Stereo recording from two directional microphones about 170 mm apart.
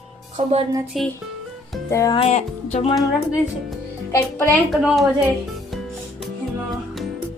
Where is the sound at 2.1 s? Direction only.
40° left (ahead or behind).